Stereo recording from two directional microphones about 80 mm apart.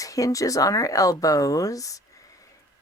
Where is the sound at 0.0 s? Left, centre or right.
Left.